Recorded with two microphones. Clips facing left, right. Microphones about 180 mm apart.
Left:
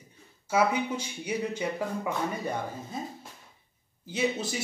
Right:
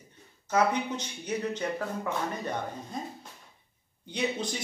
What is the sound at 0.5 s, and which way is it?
Speech, 10° left (ahead or behind).